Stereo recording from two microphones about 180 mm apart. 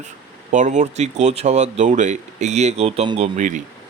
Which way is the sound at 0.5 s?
40° right (ahead or behind).